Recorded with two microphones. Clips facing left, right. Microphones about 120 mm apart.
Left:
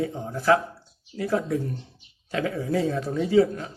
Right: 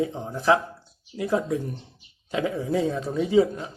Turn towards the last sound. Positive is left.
turn(degrees=-20)  # may be behind; listen again after turning